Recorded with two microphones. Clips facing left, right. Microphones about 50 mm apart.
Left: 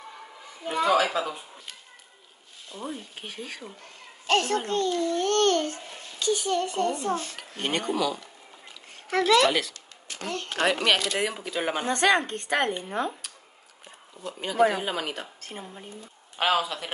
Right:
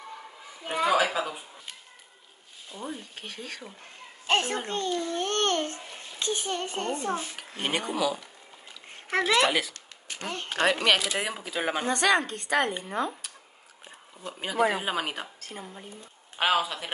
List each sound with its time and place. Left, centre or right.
0.7 s speech: centre
3.2 s speech: centre
4.3 s a child's voice: centre
7.2 s speech: centre
9.2 s speech: centre
10.1 s a sound: centre
10.5 s speech: centre
12.3 s speech: left
14.2 s speech: centre
16.3 s speech: centre